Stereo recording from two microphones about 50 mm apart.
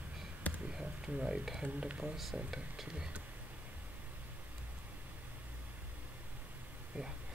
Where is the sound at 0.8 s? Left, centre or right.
Right.